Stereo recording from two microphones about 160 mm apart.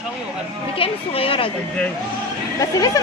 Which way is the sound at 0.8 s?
35° left (ahead or behind).